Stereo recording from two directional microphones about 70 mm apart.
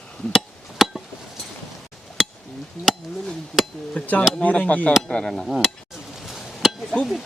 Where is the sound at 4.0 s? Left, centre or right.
Left; by 5.7 s centre.